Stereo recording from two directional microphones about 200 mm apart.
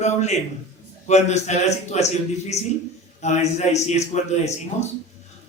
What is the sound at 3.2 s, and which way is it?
A man's voice, 35° left (ahead or behind).